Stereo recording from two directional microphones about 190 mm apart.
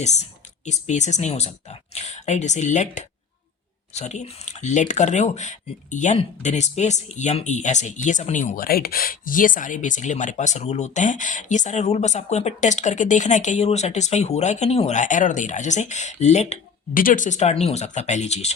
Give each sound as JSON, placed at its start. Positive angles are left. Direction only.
{"t": 0.0, "sound": "speech", "side_deg": 35}